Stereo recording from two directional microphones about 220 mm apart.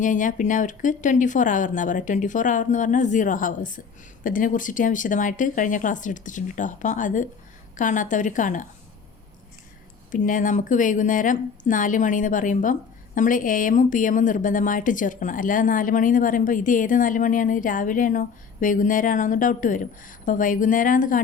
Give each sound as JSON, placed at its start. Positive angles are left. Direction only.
{"t": 0.0, "sound": "a woman's voice", "side_deg": 35}
{"t": 10.1, "sound": "a woman's voice", "side_deg": 35}